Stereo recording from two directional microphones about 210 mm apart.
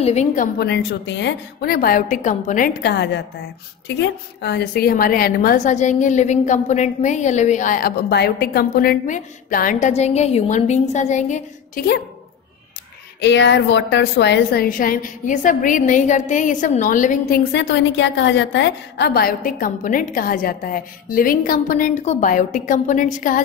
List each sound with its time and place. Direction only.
0.0 s a woman's voice: 35° left (ahead or behind)
0.6 s a woman's voice: 55° left (ahead or behind); by 11.8 s 35° left (ahead or behind)
13.2 s a woman's voice: 55° left (ahead or behind); by 17.4 s 40° left (ahead or behind)
17.5 s a woman's voice: 55° left (ahead or behind); by 23.4 s 40° left (ahead or behind)